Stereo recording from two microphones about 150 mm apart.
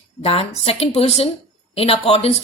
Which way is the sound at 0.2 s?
40° left (ahead or behind).